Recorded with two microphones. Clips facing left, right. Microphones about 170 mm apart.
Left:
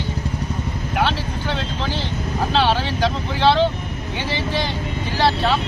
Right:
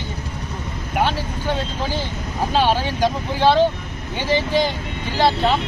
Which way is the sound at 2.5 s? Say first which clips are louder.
Right 1 dB; 15° right (ahead or behind).